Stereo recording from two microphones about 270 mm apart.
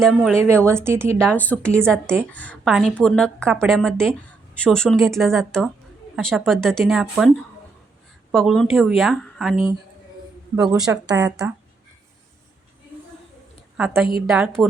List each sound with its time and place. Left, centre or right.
0.0 s a woman's voice: centre
0.4 s speech: centre
1.3 s a woman's voice: centre
13.7 s a woman's voice: centre